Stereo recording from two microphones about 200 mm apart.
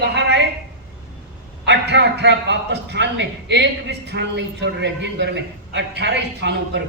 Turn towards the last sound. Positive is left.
turn(degrees=-60)  # may be behind; listen again after turning